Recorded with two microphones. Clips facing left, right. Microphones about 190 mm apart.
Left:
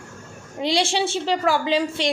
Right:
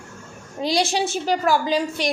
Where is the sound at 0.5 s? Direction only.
25° left (ahead or behind).